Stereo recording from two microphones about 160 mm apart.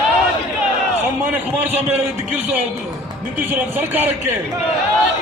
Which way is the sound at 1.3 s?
10° right (ahead or behind).